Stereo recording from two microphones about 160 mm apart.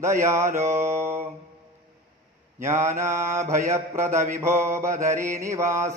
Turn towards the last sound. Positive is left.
turn(degrees=-15)  # may be behind; listen again after turning